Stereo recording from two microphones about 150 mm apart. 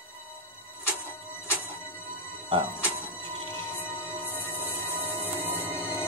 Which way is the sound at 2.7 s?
10° right (ahead or behind).